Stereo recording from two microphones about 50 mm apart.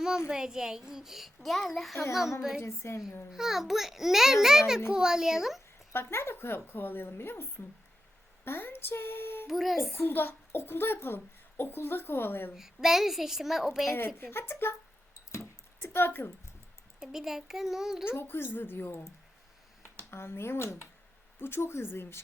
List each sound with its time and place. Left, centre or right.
0.3 s a child's voice: centre
2.6 s a woman's voice: left
3.3 s a child's voice: centre
5.9 s a child's voice: left
9.5 s a child's voice: centre
10.1 s a child's voice: left
12.5 s a child's voice: centre
14.2 s a child's voice: left
15.3 s a sound: left
17.0 s a child's voice: centre
18.1 s a child's voice: left
18.9 s a child's voice: left